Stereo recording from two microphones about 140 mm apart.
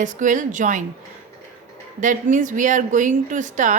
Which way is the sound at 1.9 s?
65° right (ahead or behind).